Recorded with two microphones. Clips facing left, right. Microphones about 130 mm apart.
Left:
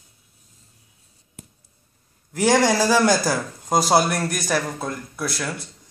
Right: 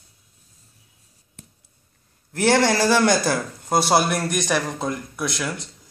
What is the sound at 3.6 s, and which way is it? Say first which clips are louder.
Speech: left 1 dB; 5° right (ahead or behind).